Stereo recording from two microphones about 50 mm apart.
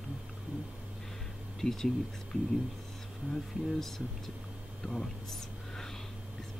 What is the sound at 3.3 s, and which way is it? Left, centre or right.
Speech, centre.